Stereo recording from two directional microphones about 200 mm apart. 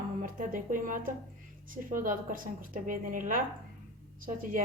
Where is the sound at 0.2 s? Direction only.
45° right (ahead or behind).